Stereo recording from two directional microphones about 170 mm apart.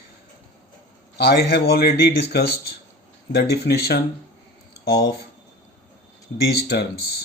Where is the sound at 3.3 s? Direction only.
70° left (ahead or behind).